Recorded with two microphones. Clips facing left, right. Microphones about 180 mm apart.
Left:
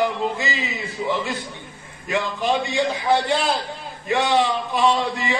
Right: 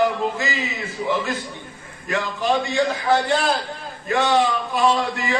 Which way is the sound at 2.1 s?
20° left (ahead or behind).